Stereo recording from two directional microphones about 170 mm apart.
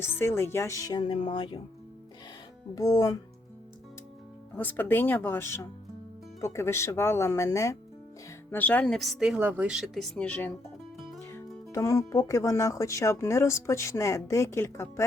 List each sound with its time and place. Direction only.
0.0 s speech: 15° left (ahead or behind)
2.7 s speech: 20° left (ahead or behind)
4.5 s speech: 10° left (ahead or behind)